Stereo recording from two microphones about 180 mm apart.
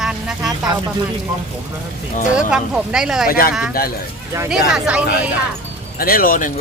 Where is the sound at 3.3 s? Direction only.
55° left (ahead or behind).